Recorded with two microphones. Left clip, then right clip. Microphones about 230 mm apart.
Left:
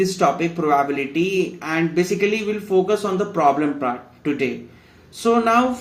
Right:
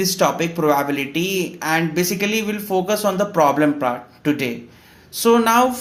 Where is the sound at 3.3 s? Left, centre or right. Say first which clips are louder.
Right 1 dB; right.